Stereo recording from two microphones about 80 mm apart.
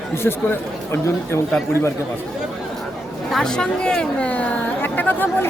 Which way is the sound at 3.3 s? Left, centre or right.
Centre.